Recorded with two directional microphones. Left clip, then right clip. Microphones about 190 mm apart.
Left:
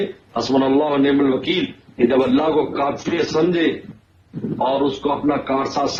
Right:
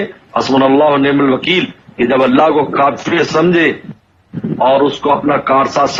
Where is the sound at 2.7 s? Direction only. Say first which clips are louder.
Right 9 dB; 30° right (ahead or behind).